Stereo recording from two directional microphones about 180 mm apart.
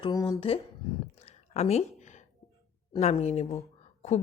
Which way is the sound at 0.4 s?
35° left (ahead or behind).